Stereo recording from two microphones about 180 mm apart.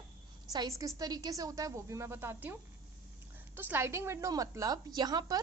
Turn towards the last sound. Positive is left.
turn(degrees=-20)  # may be behind; listen again after turning